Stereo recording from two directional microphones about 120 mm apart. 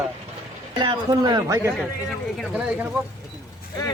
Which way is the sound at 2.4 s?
10° right (ahead or behind).